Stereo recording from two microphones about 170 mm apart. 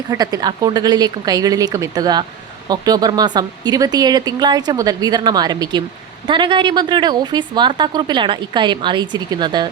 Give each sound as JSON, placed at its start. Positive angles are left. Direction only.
{"t": 0.1, "sound": "a woman's voice", "side_deg": -20}